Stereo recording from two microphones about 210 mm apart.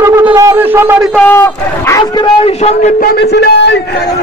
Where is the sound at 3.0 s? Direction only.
50° left (ahead or behind).